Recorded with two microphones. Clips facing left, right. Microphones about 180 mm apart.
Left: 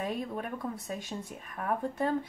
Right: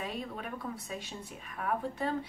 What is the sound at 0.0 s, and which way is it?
Speech, 45° left (ahead or behind).